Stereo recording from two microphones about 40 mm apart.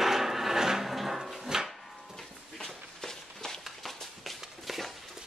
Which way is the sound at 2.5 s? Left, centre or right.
Centre.